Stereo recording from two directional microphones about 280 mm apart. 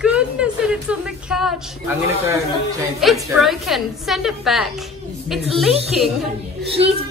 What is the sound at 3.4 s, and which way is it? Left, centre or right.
Speech, centre.